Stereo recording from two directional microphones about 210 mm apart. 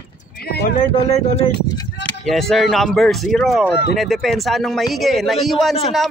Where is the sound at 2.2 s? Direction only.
Centre (ahead or behind).